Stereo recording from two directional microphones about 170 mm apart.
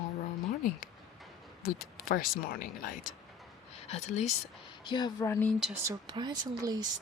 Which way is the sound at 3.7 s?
35° left (ahead or behind).